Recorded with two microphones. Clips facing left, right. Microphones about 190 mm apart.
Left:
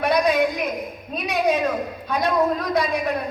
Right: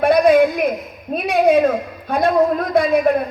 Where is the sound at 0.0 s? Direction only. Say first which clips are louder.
Right 7 dB; 50° right (ahead or behind).